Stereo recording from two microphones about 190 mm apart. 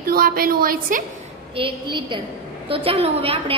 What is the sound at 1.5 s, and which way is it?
A woman's voice, 25° right (ahead or behind).